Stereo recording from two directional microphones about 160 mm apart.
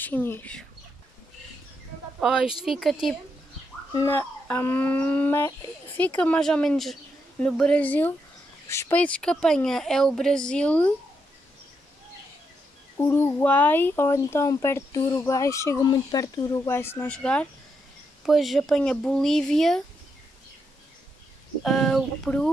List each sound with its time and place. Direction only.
0.0 s speech: 10° left (ahead or behind)
2.1 s speech: 5° right (ahead or behind)
4.1 s speech: 15° left (ahead or behind)
12.9 s speech: 15° left (ahead or behind)
21.6 s speech: centre (ahead or behind)